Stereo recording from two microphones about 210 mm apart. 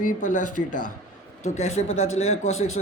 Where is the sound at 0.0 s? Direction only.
35° left (ahead or behind).